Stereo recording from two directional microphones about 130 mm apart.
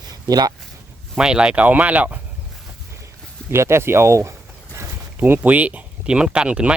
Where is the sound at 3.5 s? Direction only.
20° right (ahead or behind).